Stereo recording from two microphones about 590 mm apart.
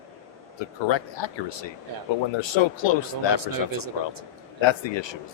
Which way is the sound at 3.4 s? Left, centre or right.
Right.